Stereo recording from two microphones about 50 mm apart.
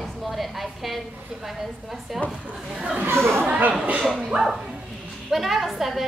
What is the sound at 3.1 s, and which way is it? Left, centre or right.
Speech, right.